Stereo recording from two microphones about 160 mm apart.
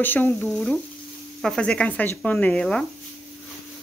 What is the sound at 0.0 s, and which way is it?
Speech, 10° left (ahead or behind).